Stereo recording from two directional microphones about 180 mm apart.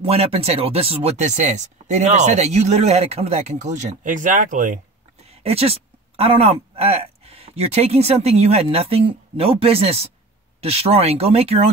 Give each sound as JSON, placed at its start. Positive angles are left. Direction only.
{"t": 0.0, "sound": "speech", "side_deg": -35}
{"t": 5.3, "sound": "speech", "side_deg": -35}